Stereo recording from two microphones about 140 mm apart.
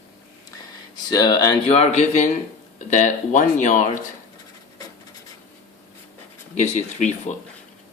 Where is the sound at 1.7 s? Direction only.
50° left (ahead or behind); by 3.9 s 65° left (ahead or behind).